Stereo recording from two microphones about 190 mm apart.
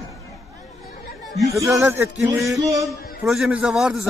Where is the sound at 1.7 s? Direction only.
15° right (ahead or behind).